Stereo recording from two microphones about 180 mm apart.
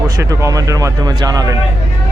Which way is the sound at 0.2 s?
15° right (ahead or behind).